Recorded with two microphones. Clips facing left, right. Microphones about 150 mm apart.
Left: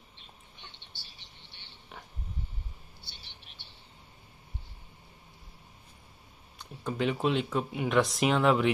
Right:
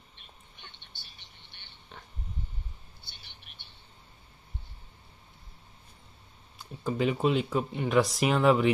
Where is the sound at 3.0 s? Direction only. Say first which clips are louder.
Left 1 dB; 50° right (ahead or behind).